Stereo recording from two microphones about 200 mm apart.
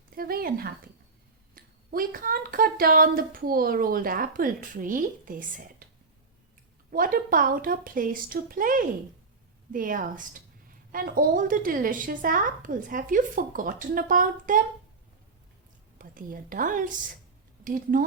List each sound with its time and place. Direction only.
0.2 s speech: 45° right (ahead or behind)
6.9 s speech: 45° right (ahead or behind)
16.0 s a woman's voice: 45° right (ahead or behind)